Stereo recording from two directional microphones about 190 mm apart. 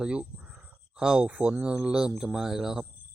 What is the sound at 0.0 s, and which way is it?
Speech, 5° right (ahead or behind).